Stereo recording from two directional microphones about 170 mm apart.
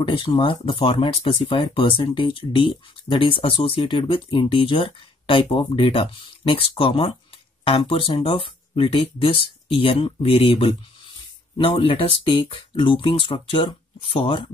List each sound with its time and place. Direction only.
0.0 s speech: 30° left (ahead or behind)